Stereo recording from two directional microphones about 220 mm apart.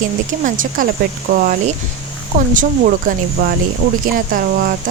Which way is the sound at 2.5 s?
40° right (ahead or behind).